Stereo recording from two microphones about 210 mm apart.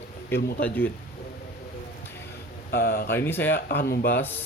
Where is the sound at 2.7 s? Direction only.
45° left (ahead or behind).